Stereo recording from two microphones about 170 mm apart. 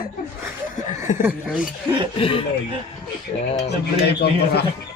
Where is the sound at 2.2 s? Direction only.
30° left (ahead or behind).